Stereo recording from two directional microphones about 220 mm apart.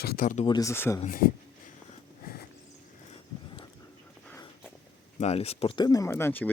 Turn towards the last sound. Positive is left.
turn(degrees=10)  # may be behind; listen again after turning